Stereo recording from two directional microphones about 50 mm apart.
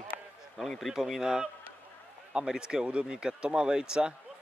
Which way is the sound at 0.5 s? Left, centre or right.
Centre.